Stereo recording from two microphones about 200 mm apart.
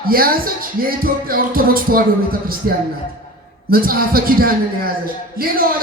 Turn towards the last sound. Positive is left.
turn(degrees=-45)  # may be behind; listen again after turning